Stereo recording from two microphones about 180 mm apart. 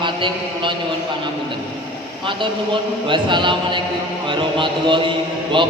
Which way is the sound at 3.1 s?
25° right (ahead or behind).